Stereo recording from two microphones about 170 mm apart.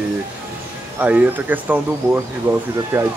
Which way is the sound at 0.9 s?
10° right (ahead or behind).